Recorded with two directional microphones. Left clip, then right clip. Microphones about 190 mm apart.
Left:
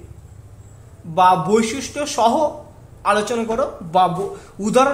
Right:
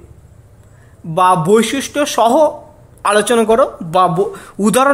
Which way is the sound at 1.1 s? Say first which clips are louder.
Right 3 dB; 45° right (ahead or behind).